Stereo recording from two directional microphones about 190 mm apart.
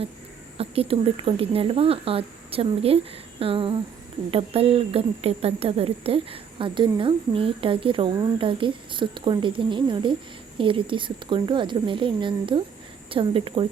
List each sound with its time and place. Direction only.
0.5 s speech: 30° right (ahead or behind)